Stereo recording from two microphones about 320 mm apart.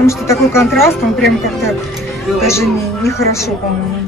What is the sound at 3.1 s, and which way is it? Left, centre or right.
Speech, centre.